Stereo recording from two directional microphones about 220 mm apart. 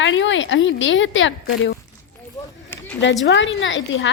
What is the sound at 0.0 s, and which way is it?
Speech, 60° left (ahead or behind).